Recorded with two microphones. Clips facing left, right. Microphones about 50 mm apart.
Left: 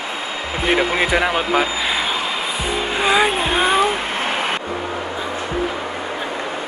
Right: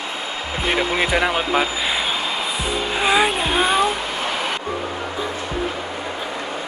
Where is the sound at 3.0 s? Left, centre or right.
Centre.